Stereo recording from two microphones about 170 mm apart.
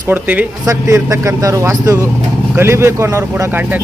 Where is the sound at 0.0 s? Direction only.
10° right (ahead or behind).